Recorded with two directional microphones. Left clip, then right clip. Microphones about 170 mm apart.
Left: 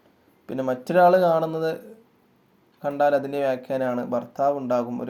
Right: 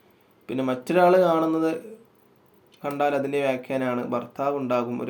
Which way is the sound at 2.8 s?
30° left (ahead or behind).